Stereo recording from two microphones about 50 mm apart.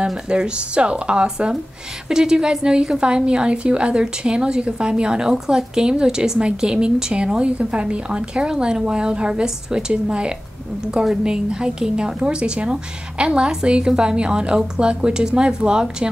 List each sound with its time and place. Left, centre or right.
0.3 s a woman's voice: right